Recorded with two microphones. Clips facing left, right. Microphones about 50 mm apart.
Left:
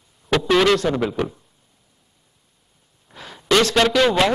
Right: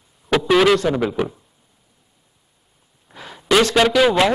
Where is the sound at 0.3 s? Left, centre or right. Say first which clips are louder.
Right 2 dB; centre.